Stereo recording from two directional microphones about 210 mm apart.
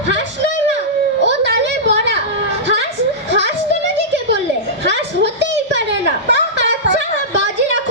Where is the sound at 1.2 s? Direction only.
55° right (ahead or behind).